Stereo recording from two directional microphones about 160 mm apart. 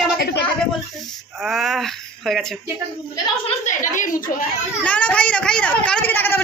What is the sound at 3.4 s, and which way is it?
A woman's voice, 50° left (ahead or behind).